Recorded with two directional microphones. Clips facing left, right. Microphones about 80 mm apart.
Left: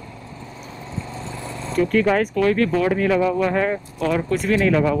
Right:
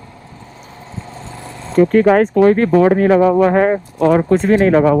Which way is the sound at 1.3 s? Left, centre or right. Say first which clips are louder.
Even; right.